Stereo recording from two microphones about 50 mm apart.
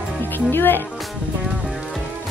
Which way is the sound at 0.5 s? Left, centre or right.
Left.